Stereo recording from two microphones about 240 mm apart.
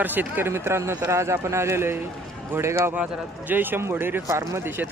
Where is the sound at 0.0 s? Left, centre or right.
Centre.